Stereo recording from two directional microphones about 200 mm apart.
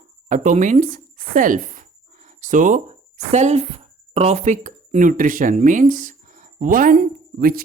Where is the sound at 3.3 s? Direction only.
35° right (ahead or behind).